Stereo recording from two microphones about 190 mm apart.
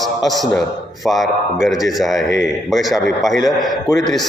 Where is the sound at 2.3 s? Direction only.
65° left (ahead or behind).